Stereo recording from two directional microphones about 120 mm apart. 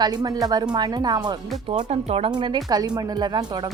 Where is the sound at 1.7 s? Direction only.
65° right (ahead or behind).